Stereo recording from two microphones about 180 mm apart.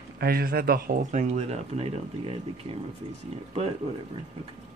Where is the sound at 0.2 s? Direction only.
55° right (ahead or behind); by 2.3 s 35° right (ahead or behind).